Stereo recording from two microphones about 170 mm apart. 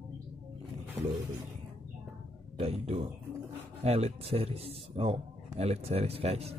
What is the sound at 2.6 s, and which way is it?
A man's voice, 35° right (ahead or behind).